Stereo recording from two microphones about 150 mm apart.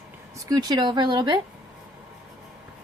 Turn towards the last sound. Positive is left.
turn(degrees=-30)  # may be behind; listen again after turning